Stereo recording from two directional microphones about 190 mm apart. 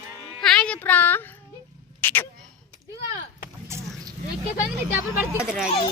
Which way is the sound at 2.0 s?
10° left (ahead or behind).